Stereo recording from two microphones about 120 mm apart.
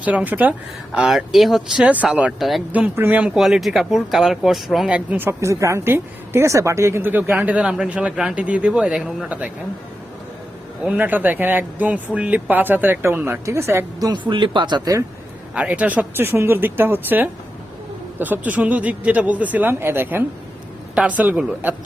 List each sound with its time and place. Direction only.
0.0 s speech: 10° right (ahead or behind)
0.9 s speech: 5° right (ahead or behind)
2.7 s speech: 15° right (ahead or behind)
10.8 s speech: 15° right (ahead or behind)
14.1 s speech: 40° right (ahead or behind)
15.5 s speech: 10° right (ahead or behind)